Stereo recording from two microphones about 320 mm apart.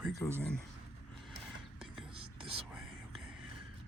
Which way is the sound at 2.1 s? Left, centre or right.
Centre.